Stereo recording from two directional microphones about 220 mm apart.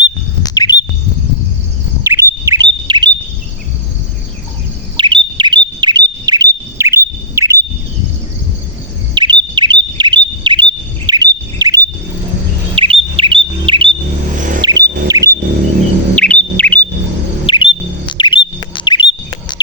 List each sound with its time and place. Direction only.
0.4 s bird: 15° left (ahead or behind)
2.0 s bird: 10° right (ahead or behind)
4.9 s chirp: 20° right (ahead or behind)
9.1 s bird: 20° right (ahead or behind)
12.7 s chirp: 25° right (ahead or behind)
14.3 s vehicle: 35° right (ahead or behind)
14.6 s music: 15° right (ahead or behind)
15.0 s a sound: 15° right (ahead or behind)
16.1 s bird: 5° left (ahead or behind)
17.4 s bird: 25° left (ahead or behind)